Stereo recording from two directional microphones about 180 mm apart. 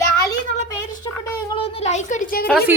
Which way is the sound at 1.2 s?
25° left (ahead or behind).